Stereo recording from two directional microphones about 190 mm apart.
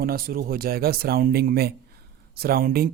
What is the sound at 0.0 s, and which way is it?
Speech, 50° right (ahead or behind).